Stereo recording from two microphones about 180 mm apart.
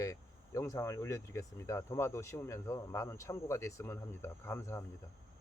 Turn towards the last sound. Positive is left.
turn(degrees=15)  # may be behind; listen again after turning